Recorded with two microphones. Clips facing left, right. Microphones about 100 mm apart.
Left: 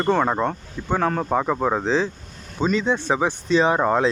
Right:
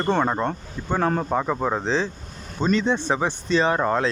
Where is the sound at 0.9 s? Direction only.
15° right (ahead or behind).